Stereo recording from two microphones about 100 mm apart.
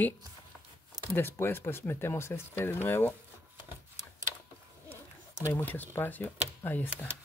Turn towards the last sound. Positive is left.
turn(degrees=20)  # may be behind; listen again after turning